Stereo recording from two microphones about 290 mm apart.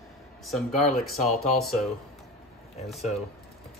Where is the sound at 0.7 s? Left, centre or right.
Left.